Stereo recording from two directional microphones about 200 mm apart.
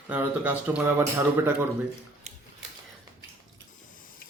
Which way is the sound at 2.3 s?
35° right (ahead or behind).